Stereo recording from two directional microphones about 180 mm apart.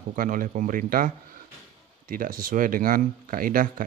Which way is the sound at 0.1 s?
50° right (ahead or behind).